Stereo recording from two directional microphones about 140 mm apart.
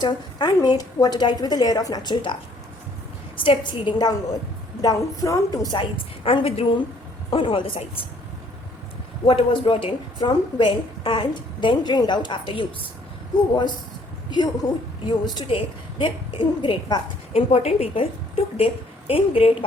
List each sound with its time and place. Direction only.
0.0 s a woman's voice: 30° left (ahead or behind)
6.2 s a woman's voice: 40° left (ahead or behind)
9.2 s a woman's voice: 40° left (ahead or behind)
14.3 s a woman's voice: 30° left (ahead or behind)
17.5 s a woman's voice: 50° left (ahead or behind)